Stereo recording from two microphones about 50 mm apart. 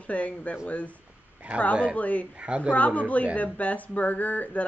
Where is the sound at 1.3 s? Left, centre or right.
Right.